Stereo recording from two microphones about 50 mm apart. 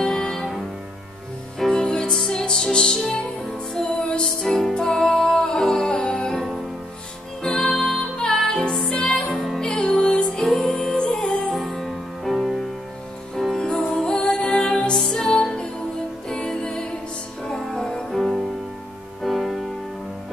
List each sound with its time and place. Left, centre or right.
0.0 s music: centre
1.6 s music: centre
4.4 s music: centre
7.4 s music: centre
11.0 s music: centre
11.5 s music: centre
13.6 s music: centre
17.5 s music: centre
18.1 s music: centre